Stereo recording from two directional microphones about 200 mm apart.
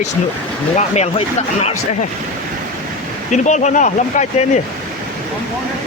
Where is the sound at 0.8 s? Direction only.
35° left (ahead or behind).